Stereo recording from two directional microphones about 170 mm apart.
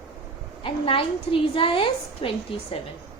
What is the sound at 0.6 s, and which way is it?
A woman's voice, 30° left (ahead or behind).